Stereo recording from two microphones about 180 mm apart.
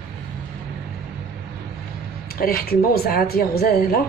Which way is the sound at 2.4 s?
55° left (ahead or behind).